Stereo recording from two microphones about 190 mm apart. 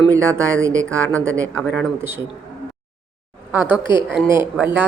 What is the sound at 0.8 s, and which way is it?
Speech, 90° right.